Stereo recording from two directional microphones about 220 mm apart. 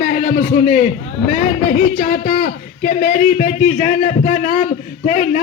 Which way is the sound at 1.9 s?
40° left (ahead or behind).